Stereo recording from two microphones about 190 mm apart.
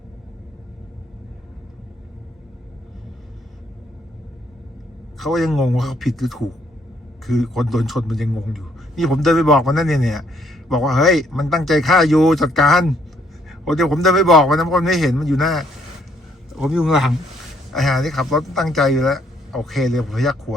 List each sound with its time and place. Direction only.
5.2 s a man's voice: centre (ahead or behind)